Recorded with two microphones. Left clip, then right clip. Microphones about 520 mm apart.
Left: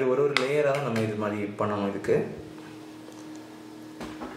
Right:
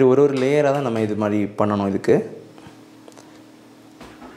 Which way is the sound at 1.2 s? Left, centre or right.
Right.